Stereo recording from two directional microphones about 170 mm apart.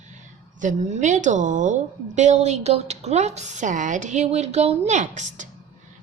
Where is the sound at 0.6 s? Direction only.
45° right (ahead or behind).